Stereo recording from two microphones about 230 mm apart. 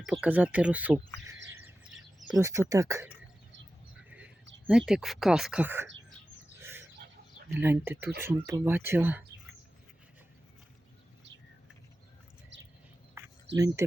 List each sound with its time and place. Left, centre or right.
0.0 s speech: centre
2.2 s speech: centre
4.9 s speech: centre
6.6 s a sound: centre
7.5 s speech: centre
13.5 s speech: right